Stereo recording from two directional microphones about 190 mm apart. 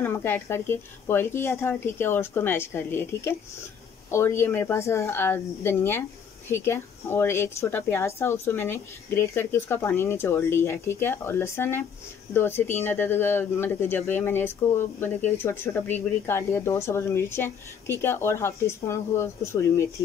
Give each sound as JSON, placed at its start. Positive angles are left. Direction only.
{"t": 0.0, "sound": "speech", "side_deg": 10}